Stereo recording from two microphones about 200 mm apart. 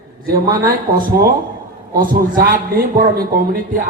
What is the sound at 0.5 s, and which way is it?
A man's voice, 45° right (ahead or behind).